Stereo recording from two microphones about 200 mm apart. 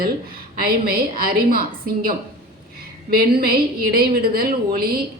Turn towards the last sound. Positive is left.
turn(degrees=-50)  # may be behind; listen again after turning